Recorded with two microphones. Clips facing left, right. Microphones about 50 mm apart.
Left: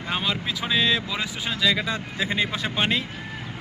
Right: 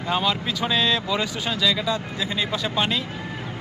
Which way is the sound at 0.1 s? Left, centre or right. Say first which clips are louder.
Right 3 dB; centre.